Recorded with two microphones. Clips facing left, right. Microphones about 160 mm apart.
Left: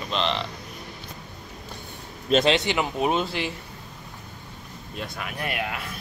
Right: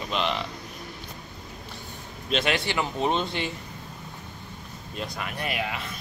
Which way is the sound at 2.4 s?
20° left (ahead or behind).